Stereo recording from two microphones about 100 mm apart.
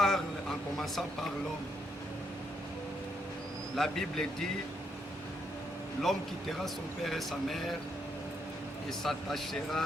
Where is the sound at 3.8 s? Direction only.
5° left (ahead or behind).